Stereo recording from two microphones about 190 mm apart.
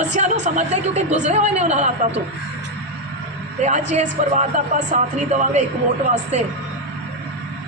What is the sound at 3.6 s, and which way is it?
A woman's voice, 35° right (ahead or behind).